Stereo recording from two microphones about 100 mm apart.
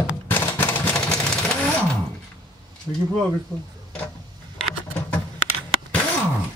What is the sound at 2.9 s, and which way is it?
Speech, 10° left (ahead or behind).